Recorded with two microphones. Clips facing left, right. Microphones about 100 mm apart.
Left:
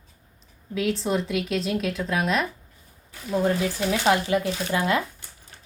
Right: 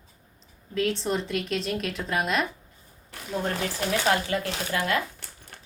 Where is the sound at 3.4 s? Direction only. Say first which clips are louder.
Left 5 dB; 15° left (ahead or behind).